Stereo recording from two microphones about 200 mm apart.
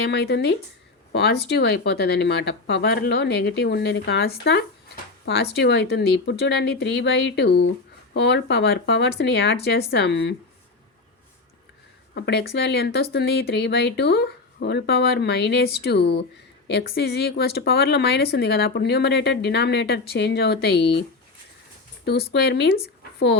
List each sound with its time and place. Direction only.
0.0 s speech: 55° left (ahead or behind)
12.1 s speech: 55° left (ahead or behind)
22.0 s speech: 55° left (ahead or behind)